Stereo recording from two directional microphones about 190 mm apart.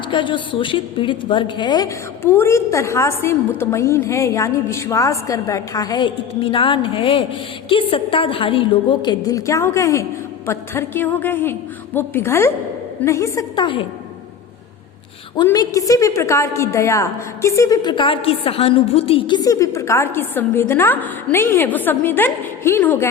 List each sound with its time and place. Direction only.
0.1 s a woman's voice: 25° left (ahead or behind)
15.4 s a woman's voice: 20° left (ahead or behind)